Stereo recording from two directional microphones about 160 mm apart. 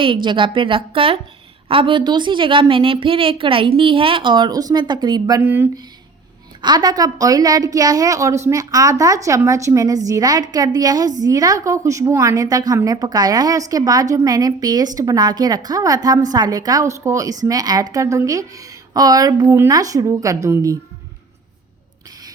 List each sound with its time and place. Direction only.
0.0 s a woman's voice: 30° right (ahead or behind)
5.4 s speech: 15° right (ahead or behind)
6.6 s a woman's voice: 25° right (ahead or behind)